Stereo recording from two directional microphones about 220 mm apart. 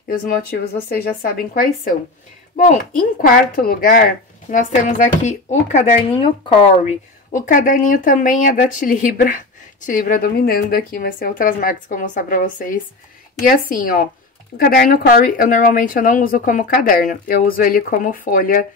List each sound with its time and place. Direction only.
0.1 s speech: 45° left (ahead or behind)
3.2 s speech: 40° left (ahead or behind); by 6.9 s 25° left (ahead or behind)
7.3 s speech: 35° left (ahead or behind)